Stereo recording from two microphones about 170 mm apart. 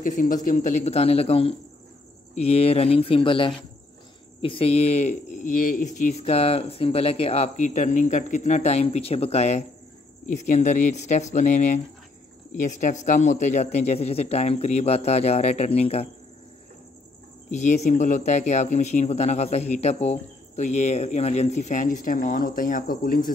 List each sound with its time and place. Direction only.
0.0 s a man's voice: 50° left (ahead or behind)
17.5 s a man's voice: 45° left (ahead or behind)